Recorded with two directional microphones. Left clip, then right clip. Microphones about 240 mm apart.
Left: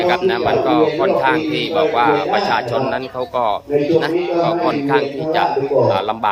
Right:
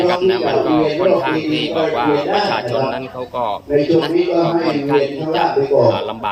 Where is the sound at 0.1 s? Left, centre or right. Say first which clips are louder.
Even; centre.